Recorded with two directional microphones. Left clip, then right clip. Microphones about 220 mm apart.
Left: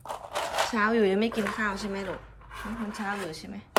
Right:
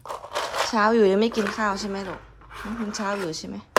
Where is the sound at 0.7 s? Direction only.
15° right (ahead or behind).